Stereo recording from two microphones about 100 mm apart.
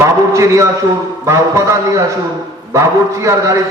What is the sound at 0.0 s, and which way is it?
A man's voice, 30° right (ahead or behind).